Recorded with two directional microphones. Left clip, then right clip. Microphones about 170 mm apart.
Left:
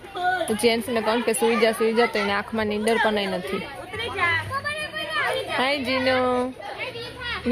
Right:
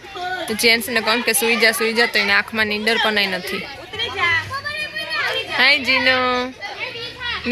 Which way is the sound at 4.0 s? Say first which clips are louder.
Right 5 dB; 50° right (ahead or behind).